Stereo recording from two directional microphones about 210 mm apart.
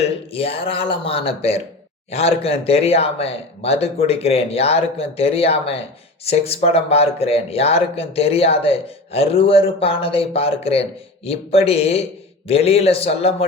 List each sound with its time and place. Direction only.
0.0 s speech: 30° left (ahead or behind)